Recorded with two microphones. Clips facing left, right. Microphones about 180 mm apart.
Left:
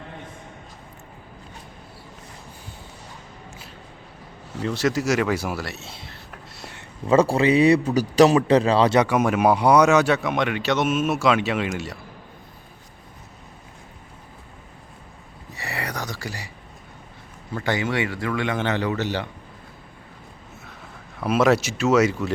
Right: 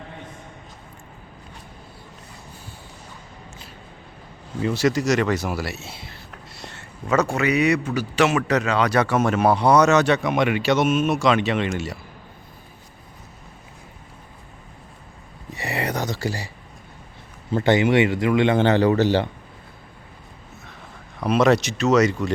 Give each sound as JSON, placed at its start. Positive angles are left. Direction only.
{"t": 4.6, "sound": "speech", "side_deg": 0}
{"t": 7.1, "sound": "a man's voice", "side_deg": 30}
{"t": 9.0, "sound": "speech", "side_deg": 10}
{"t": 15.5, "sound": "a sound", "side_deg": -20}
{"t": 17.5, "sound": "speech", "side_deg": -25}
{"t": 21.2, "sound": "speech", "side_deg": 5}